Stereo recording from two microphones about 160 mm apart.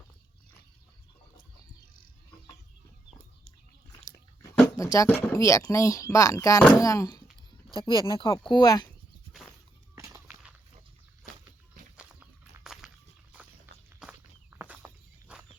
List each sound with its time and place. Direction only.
4.8 s speech: 20° left (ahead or behind)
5.0 s speech: 5° left (ahead or behind)
5.3 s speech: 20° left (ahead or behind)
9.9 s walk: 20° right (ahead or behind)
11.9 s a sound: 5° right (ahead or behind)
14.0 s walk: 10° right (ahead or behind)